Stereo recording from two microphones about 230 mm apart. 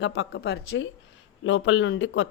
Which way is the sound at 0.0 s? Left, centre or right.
Left.